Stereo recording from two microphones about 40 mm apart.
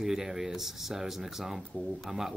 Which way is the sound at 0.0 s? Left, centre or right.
Centre.